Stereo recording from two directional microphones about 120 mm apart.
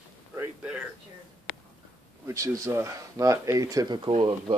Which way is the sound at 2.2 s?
25° right (ahead or behind).